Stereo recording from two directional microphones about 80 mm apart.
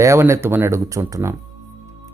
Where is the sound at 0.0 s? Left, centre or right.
Right.